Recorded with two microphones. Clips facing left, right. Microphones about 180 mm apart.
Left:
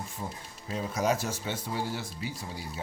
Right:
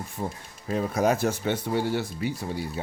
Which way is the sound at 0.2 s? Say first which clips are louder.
Right 6 dB; 50° right (ahead or behind).